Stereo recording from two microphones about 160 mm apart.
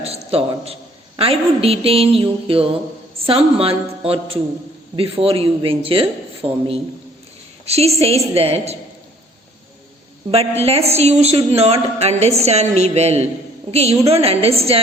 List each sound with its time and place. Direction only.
0.0 s a woman's voice: 40° right (ahead or behind)
10.3 s a woman's voice: 40° right (ahead or behind)